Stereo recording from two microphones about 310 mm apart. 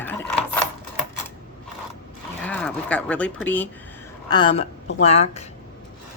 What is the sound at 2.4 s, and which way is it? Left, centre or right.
A woman's voice, centre.